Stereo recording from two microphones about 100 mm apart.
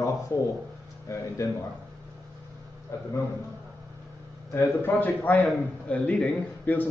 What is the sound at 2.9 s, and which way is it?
Speech, 35° left (ahead or behind).